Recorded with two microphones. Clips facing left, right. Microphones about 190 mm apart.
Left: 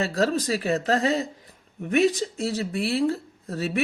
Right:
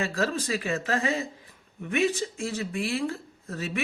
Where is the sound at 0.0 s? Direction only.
35° left (ahead or behind).